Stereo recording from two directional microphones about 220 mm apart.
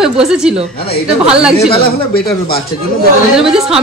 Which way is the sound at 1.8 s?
45° left (ahead or behind).